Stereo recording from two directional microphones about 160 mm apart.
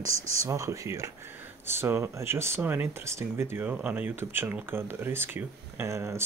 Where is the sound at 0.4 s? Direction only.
20° right (ahead or behind).